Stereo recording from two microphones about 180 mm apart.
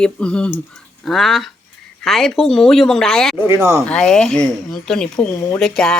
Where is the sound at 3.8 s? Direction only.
5° left (ahead or behind).